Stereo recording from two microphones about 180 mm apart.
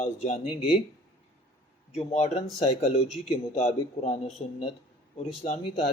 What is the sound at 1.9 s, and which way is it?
Speech, 35° left (ahead or behind).